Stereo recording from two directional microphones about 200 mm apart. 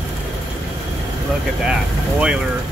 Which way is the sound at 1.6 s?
5° right (ahead or behind).